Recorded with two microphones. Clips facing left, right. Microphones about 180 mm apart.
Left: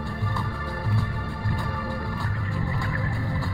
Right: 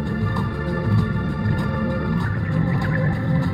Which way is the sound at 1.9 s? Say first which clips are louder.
Right 8 dB; 60° right (ahead or behind).